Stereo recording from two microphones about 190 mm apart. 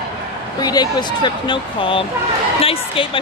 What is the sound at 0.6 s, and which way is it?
Speech, 20° left (ahead or behind).